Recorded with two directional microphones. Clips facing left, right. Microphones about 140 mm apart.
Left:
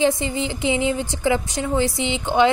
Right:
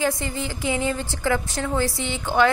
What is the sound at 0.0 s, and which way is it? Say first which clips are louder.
A woman's voice: left 5 dB; 20° left (ahead or behind).